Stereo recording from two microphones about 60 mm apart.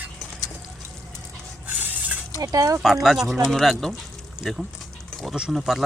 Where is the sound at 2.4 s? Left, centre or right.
Right.